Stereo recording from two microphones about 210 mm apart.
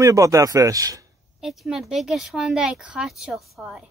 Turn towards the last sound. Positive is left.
turn(degrees=-5)  # may be behind; listen again after turning